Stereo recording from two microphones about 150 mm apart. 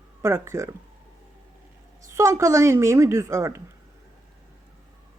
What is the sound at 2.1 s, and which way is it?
A woman's voice, 20° right (ahead or behind).